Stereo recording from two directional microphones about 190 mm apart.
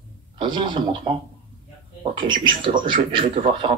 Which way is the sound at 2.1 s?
25° right (ahead or behind).